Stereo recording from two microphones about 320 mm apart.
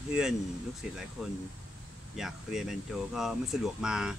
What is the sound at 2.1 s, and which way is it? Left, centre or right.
Speech, centre.